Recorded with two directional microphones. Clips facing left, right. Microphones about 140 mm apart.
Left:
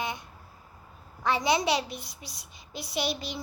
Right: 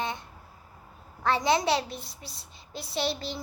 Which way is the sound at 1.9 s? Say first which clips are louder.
Even; 25° right (ahead or behind).